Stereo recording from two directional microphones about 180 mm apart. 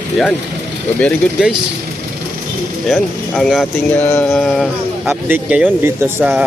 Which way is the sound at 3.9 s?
10° left (ahead or behind).